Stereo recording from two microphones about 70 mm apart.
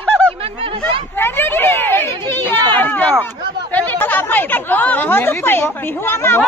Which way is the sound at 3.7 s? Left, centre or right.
Left.